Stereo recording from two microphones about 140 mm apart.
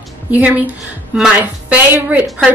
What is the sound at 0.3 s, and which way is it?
Music, 10° right (ahead or behind).